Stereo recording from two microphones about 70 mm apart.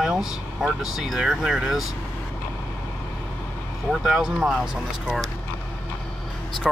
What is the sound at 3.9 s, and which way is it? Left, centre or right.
Speech, centre.